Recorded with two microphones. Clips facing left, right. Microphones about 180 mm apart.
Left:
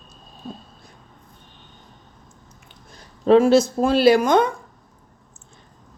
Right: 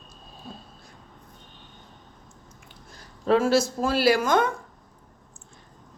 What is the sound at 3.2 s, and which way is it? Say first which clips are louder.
A woman's voice: left 7 dB; 20° left (ahead or behind).